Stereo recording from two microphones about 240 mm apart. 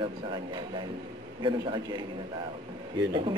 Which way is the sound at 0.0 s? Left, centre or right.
Centre.